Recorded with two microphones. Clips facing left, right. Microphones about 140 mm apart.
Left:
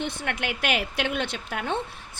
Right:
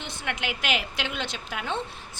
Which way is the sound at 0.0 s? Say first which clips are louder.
Left 3 dB; 55° left (ahead or behind).